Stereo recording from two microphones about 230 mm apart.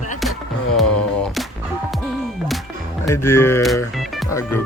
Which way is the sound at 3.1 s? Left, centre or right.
Centre.